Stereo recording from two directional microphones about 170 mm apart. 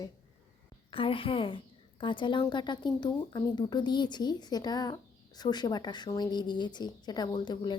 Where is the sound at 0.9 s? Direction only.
30° left (ahead or behind).